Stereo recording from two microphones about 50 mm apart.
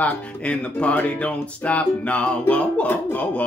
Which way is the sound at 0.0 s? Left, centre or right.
Left.